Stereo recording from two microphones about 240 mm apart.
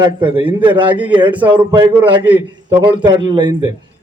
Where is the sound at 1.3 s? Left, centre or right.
Centre.